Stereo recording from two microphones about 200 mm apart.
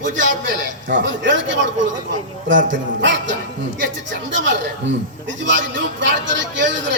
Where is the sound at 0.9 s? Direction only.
65° right (ahead or behind).